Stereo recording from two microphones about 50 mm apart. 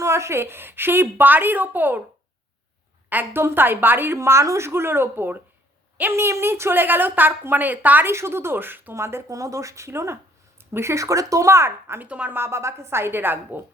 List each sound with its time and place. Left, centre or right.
0.0 s a woman's voice: right
3.1 s a woman's voice: right
4.2 s a woman's voice: right
8.0 s a woman's voice: right
9.0 s speech: right
10.8 s speech: right
12.0 s speech: right
12.3 s a woman's voice: right